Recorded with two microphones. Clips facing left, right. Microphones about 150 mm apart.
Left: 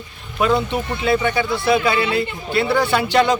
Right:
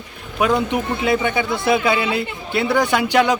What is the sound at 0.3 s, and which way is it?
A man's voice, 10° right (ahead or behind).